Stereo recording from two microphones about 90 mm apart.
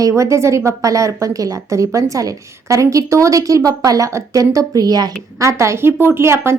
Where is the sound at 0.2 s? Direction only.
35° right (ahead or behind).